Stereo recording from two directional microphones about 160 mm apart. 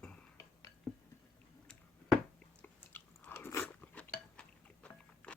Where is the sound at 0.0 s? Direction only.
5° left (ahead or behind).